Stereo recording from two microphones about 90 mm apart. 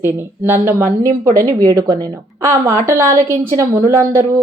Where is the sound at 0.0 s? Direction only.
25° right (ahead or behind).